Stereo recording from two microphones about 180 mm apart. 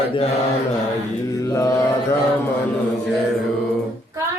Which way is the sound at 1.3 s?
15° left (ahead or behind).